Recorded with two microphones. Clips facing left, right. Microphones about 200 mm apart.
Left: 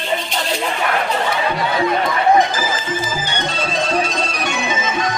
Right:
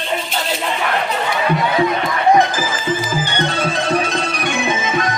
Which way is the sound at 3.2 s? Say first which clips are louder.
Right 3 dB; 55° right (ahead or behind).